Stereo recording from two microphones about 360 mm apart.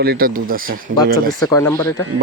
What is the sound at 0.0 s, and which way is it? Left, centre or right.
Speech, right.